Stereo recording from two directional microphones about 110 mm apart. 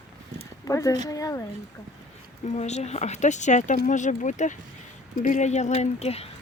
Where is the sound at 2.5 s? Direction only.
90° left; by 6.2 s 70° left (ahead or behind).